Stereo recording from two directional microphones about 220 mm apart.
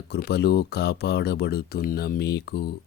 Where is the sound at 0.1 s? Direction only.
50° left (ahead or behind).